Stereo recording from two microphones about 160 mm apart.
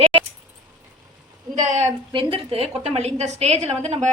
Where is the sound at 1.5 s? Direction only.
50° right (ahead or behind).